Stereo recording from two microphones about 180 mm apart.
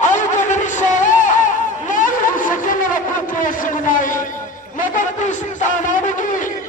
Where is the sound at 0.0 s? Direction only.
45° left (ahead or behind).